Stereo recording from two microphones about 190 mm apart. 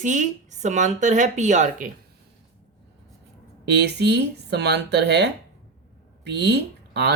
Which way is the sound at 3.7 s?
60° right (ahead or behind).